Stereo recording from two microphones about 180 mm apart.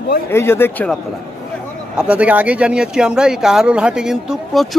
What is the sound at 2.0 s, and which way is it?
Speech, 5° right (ahead or behind).